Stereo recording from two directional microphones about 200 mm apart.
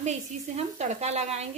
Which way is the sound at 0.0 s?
35° right (ahead or behind).